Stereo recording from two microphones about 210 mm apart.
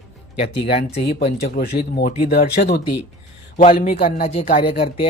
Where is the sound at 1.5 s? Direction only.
45° left (ahead or behind).